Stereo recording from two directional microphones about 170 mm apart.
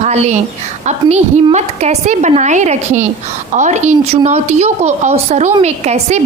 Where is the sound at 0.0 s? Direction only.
45° right (ahead or behind).